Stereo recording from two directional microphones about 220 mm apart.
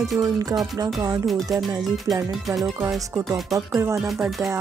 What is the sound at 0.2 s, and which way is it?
Speech, 15° right (ahead or behind).